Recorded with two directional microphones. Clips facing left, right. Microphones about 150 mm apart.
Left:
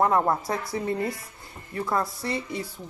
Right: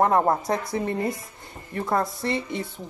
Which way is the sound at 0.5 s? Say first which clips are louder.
Right 2 dB; 20° right (ahead or behind).